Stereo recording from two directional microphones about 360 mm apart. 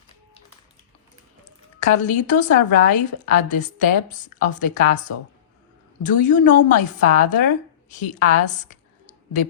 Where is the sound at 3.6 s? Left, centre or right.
Left.